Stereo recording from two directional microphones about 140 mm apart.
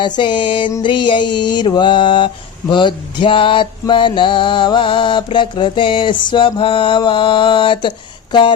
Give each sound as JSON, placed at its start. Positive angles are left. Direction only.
{"t": 0.0, "sound": "mantra", "side_deg": 35}